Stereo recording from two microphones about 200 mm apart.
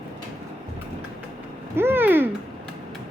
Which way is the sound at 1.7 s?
10° right (ahead or behind).